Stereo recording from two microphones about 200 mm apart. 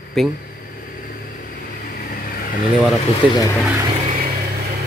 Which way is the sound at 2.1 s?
45° left (ahead or behind).